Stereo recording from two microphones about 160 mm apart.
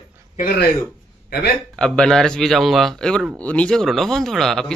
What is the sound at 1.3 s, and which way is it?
Speech, 80° left.